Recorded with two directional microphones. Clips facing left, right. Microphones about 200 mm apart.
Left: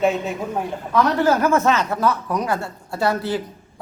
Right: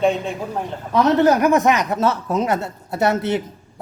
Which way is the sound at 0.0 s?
5° left (ahead or behind).